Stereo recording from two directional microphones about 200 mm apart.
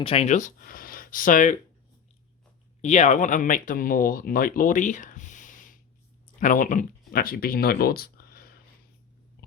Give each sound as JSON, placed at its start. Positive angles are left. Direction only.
{"t": 0.0, "sound": "speech", "side_deg": 30}
{"t": 2.8, "sound": "speech", "side_deg": 35}